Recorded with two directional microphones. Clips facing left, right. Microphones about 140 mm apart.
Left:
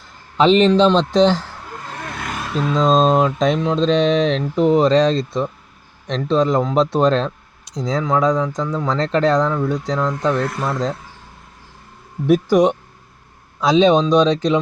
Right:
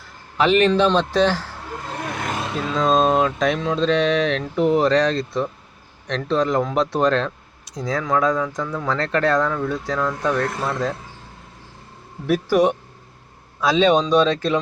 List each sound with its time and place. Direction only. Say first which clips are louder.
0.3 s speech: left 4 dB; 25° left (ahead or behind)
2.0 s vehicle: right 2 dB; 25° right (ahead or behind)
2.8 s speech: left 2 dB; 20° left (ahead or behind)
12.3 s speech: left 3 dB; 20° left (ahead or behind)